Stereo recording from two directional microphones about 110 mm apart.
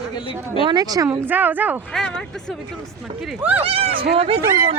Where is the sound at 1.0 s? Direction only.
20° right (ahead or behind).